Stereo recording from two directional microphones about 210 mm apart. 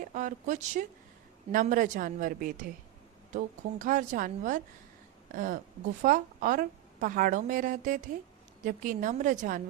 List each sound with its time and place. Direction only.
0.0 s a woman's voice: 35° right (ahead or behind)